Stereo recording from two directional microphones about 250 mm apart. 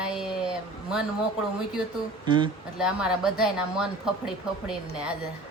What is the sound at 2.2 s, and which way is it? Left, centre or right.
Speech, centre.